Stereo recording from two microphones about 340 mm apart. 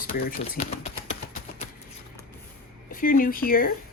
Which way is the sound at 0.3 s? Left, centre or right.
Left.